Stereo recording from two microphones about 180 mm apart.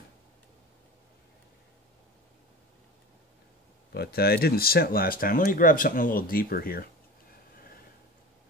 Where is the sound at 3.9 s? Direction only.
60° left (ahead or behind).